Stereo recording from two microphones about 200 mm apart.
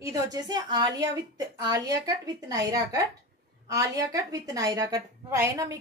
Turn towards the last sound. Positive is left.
turn(degrees=-15)  # may be behind; listen again after turning